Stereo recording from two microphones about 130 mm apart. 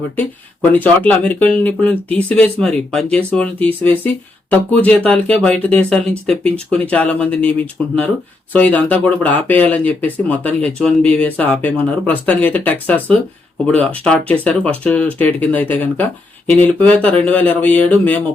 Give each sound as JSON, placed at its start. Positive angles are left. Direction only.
{"t": 0.2, "sound": "speech", "side_deg": 15}